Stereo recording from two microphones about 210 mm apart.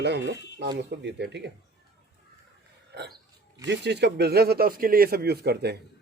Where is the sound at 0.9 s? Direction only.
55° right (ahead or behind).